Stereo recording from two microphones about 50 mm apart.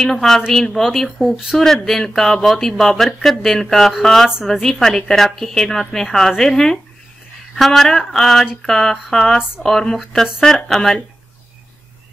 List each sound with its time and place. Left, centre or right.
0.0 s speech: centre